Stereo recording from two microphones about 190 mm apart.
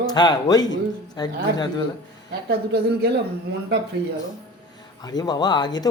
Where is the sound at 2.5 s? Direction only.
55° right (ahead or behind).